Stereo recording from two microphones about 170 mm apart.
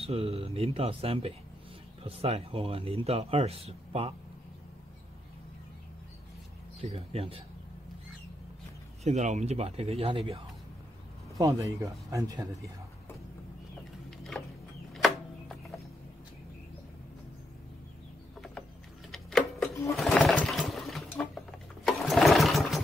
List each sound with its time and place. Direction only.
0.0 s a man's voice: 35° right (ahead or behind)
6.8 s a man's voice: 35° right (ahead or behind)
9.0 s a man's voice: 40° right (ahead or behind)
11.3 s speech: 20° right (ahead or behind)
15.0 s music: centre (ahead or behind)
19.1 s a sound: 5° left (ahead or behind)
20.0 s sewing machine: 5° left (ahead or behind)